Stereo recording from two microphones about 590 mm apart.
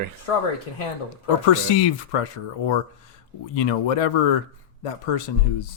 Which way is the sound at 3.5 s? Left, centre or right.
Left.